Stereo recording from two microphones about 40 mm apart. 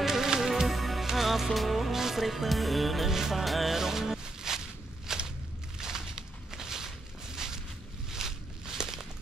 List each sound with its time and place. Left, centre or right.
0.0 s music: centre
5.0 s walk: centre
5.8 s a sound: centre
7.3 s boat: centre
8.1 s walk: centre